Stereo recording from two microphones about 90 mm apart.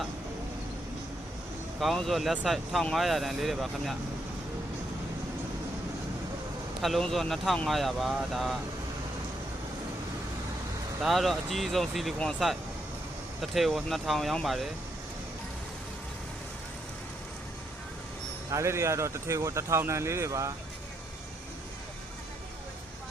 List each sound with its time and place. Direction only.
1.8 s speech: centre (ahead or behind)
6.8 s speech: centre (ahead or behind)
11.0 s speech: centre (ahead or behind)
18.5 s speech: 30° right (ahead or behind)